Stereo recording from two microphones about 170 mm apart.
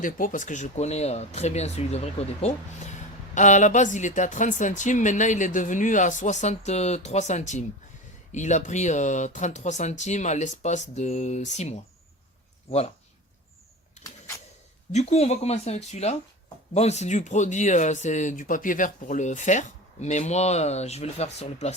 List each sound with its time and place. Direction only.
0.0 s speech: 50° left (ahead or behind)
14.9 s speech: 40° left (ahead or behind)